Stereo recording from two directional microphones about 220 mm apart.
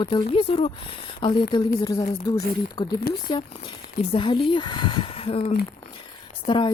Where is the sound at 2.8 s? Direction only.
20° left (ahead or behind).